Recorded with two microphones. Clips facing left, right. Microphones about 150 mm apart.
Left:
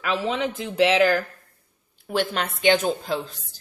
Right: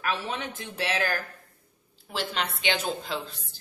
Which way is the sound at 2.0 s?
50° left (ahead or behind).